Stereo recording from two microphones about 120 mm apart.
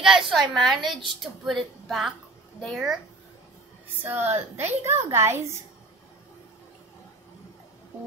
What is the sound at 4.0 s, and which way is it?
A woman's voice, 15° right (ahead or behind).